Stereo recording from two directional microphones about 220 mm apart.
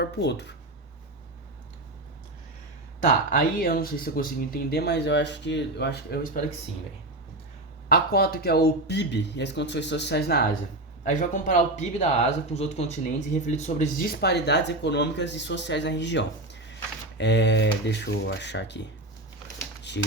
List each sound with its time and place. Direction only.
0.0 s speech: 50° left (ahead or behind)
3.0 s speech: 40° left (ahead or behind)
7.9 s speech: 45° left (ahead or behind)
11.2 s speech: 35° left (ahead or behind); by 18.9 s 50° left (ahead or behind)